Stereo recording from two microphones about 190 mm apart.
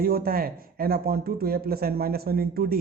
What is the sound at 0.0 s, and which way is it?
Speech, 50° right (ahead or behind).